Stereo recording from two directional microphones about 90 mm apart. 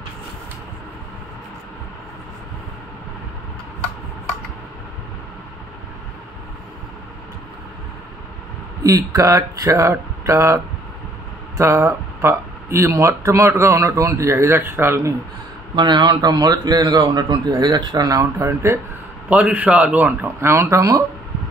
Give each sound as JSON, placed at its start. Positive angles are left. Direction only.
{"t": 8.8, "sound": "speech", "side_deg": -40}
{"t": 11.6, "sound": "speech", "side_deg": -25}
{"t": 15.7, "sound": "a man's voice", "side_deg": -60}
{"t": 19.2, "sound": "a man's voice", "side_deg": -15}
{"t": 20.3, "sound": "speech", "side_deg": -30}